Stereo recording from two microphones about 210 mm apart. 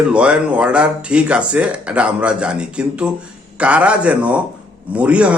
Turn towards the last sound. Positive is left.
turn(degrees=-5)  # may be behind; listen again after turning